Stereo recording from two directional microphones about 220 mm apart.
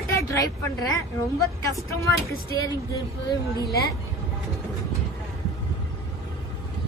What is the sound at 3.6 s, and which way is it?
Speech, 45° left (ahead or behind).